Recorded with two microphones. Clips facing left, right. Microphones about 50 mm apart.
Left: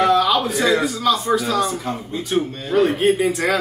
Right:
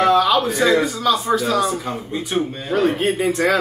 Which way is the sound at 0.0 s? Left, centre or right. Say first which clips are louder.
Right 1 dB; centre.